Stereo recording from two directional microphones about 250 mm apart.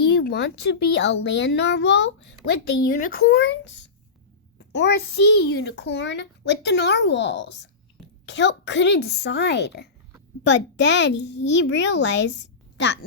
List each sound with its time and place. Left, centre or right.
0.0 s a child's voice: left